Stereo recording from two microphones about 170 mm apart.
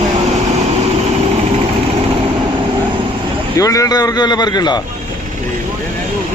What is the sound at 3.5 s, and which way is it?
A man's voice, 20° left (ahead or behind).